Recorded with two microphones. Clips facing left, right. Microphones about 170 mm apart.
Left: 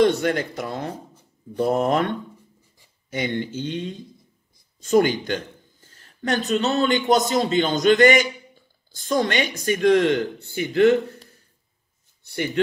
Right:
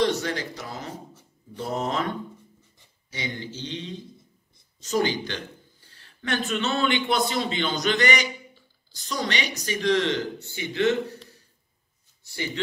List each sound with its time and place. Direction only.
0.0 s speech: 55° left (ahead or behind)